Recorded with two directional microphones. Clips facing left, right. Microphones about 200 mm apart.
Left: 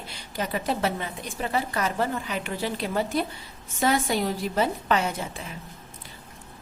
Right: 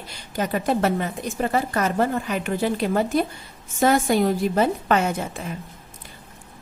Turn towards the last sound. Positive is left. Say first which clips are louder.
# right 5 dB
turn(degrees=-50)  # may be behind; listen again after turning